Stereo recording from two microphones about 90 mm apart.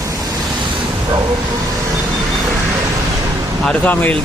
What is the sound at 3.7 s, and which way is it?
Speech, 15° left (ahead or behind).